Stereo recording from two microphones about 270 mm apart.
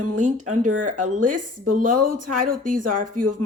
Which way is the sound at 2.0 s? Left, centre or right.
Right.